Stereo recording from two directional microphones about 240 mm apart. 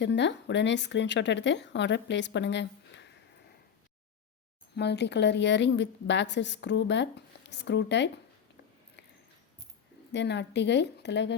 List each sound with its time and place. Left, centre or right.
0.0 s speech: left
4.7 s speech: left
10.1 s speech: left